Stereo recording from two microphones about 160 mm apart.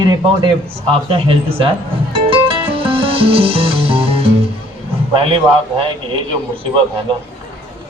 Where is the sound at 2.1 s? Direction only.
35° right (ahead or behind).